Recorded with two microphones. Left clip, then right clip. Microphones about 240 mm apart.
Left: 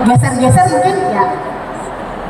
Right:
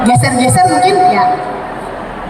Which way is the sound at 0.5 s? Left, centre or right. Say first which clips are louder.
Right 2 dB; right.